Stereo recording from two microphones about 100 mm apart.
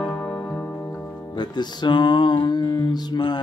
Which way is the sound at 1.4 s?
50° left (ahead or behind).